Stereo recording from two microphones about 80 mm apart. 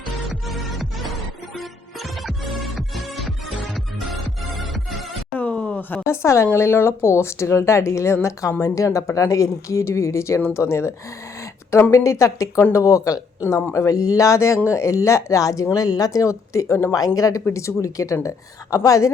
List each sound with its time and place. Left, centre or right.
0.3 s music: centre
5.4 s a sound: centre
6.1 s speech: left